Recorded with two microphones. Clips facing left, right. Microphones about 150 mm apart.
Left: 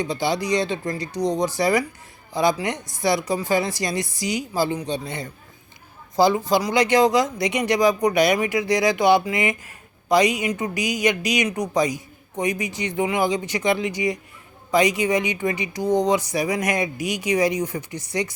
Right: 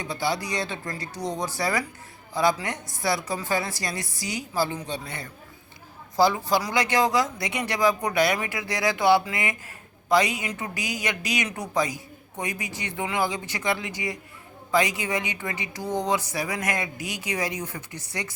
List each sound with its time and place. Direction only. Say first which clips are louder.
0.0 s speech: left 5 dB; 20° left (ahead or behind)